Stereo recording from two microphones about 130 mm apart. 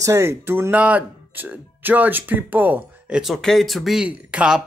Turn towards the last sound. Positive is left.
turn(degrees=-10)  # may be behind; listen again after turning